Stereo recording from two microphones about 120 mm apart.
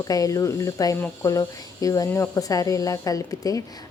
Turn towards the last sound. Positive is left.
turn(degrees=30)  # may be behind; listen again after turning